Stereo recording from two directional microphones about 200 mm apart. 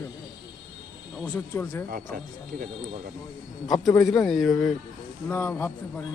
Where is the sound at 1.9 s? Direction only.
40° right (ahead or behind).